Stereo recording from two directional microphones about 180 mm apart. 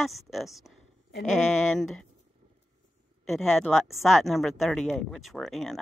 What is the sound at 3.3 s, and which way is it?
Speech, centre (ahead or behind).